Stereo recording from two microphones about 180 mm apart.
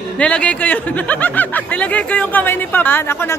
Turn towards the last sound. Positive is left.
turn(degrees=10)  # may be behind; listen again after turning